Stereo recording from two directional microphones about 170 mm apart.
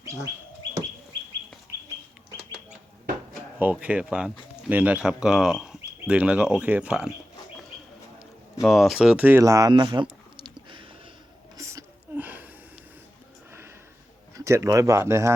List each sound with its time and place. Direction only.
3.6 s speech: 10° right (ahead or behind)
8.6 s speech: centre (ahead or behind); by 10.5 s 25° right (ahead or behind)
11.5 s a sound: 20° right (ahead or behind)
13.5 s sniff: 15° right (ahead or behind)
14.3 s speech: 15° right (ahead or behind)